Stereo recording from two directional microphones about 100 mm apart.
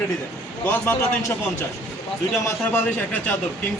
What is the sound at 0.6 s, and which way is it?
A man's voice, 20° left (ahead or behind).